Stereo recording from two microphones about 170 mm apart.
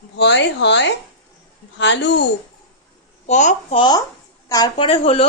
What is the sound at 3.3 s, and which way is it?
Speech, 45° left (ahead or behind).